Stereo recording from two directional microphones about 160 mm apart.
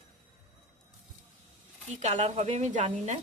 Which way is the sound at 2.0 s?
50° right (ahead or behind).